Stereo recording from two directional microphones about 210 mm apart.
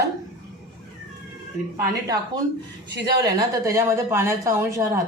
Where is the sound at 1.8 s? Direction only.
15° right (ahead or behind).